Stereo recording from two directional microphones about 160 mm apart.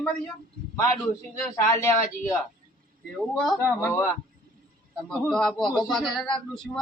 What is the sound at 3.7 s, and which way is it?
Speech, 15° left (ahead or behind).